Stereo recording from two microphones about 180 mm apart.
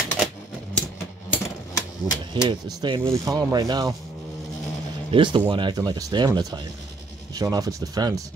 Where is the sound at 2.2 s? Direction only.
25° right (ahead or behind).